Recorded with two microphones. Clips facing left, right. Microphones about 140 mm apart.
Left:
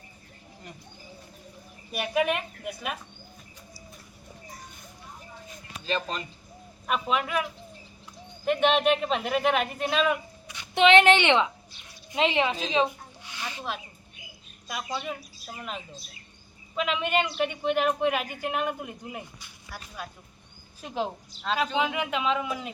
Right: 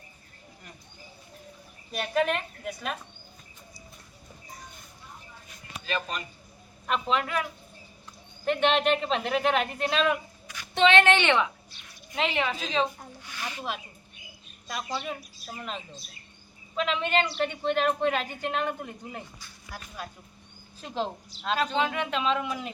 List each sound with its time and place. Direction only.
1.9 s speech: 10° left (ahead or behind)
5.8 s speech: 30° left (ahead or behind)
6.8 s speech: 5° left (ahead or behind)
8.4 s speech: 5° left (ahead or behind)
10.5 s speech: 20° left (ahead or behind)
12.1 s a sound: 20° left (ahead or behind)
13.6 s speech: centre (ahead or behind)